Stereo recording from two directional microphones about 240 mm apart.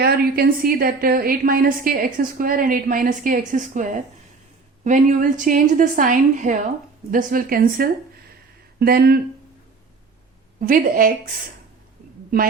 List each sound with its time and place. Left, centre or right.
0.0 s a woman's voice: right
10.6 s a woman's voice: right